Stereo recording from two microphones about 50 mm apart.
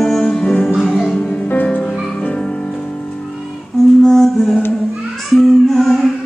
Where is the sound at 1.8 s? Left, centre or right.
Centre.